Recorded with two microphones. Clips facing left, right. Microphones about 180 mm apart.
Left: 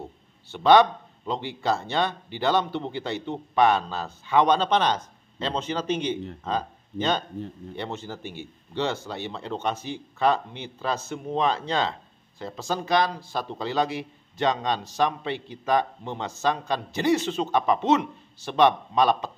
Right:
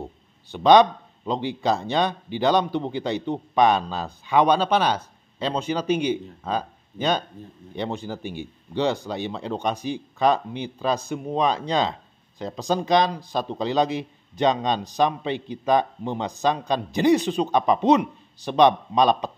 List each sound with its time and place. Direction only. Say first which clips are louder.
0.5 s speech: right 2 dB; 15° right (ahead or behind)